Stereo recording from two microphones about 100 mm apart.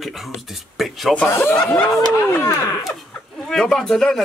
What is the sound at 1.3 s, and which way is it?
Speech, 25° left (ahead or behind).